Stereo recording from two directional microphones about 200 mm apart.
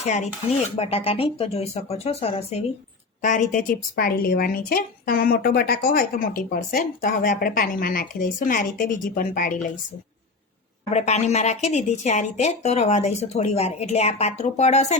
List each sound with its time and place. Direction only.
0.0 s a woman's voice: 35° left (ahead or behind)
10.9 s a woman's voice: 35° left (ahead or behind)